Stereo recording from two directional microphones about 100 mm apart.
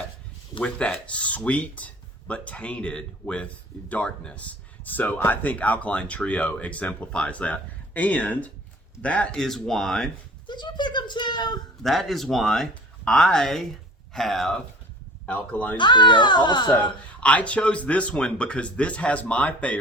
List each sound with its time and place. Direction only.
0.6 s speech: 10° left (ahead or behind)
10.4 s a child's voice: 50° left (ahead or behind)
11.8 s speech: centre (ahead or behind)
15.3 s speech: 15° left (ahead or behind)
15.8 s a child's voice: 50° left (ahead or behind)
17.2 s speech: 15° left (ahead or behind)